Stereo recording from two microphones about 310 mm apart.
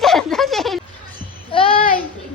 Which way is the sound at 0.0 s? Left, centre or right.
Centre.